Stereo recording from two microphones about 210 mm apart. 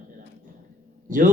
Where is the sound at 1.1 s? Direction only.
40° right (ahead or behind).